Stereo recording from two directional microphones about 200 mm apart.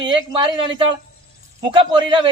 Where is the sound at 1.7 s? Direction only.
25° right (ahead or behind).